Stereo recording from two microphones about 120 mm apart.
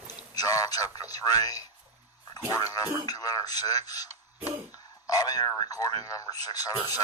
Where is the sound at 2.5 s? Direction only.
30° left (ahead or behind).